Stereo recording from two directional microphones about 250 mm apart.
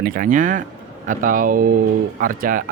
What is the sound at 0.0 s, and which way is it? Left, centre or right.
Speech, right.